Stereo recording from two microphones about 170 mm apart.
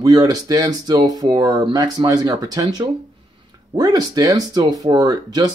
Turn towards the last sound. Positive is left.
turn(degrees=-25)  # may be behind; listen again after turning